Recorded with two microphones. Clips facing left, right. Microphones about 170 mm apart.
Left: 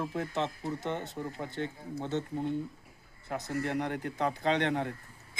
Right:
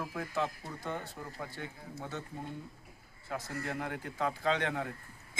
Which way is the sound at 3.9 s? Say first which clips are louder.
Left 5 dB; 45° left (ahead or behind).